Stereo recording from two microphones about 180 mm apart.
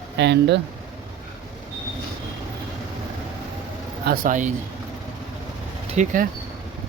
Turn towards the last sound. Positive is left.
turn(degrees=-40)  # may be behind; listen again after turning